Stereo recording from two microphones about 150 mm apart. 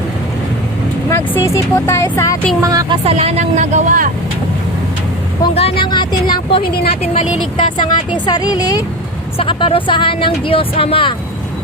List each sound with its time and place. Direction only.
1.1 s speech: 15° left (ahead or behind)
2.6 s speech: 25° right (ahead or behind)
3.0 s speech: 45° right (ahead or behind); by 4.1 s 60° right (ahead or behind)
5.4 s speech: 40° left (ahead or behind)
9.4 s speech: 35° left (ahead or behind)